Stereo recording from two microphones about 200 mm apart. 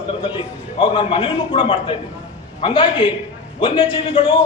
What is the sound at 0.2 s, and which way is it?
A man's voice, 25° left (ahead or behind).